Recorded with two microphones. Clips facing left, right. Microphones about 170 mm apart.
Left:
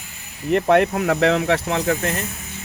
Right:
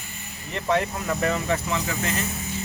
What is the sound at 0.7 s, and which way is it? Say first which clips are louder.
Speech: left 6 dB; 65° left (ahead or behind).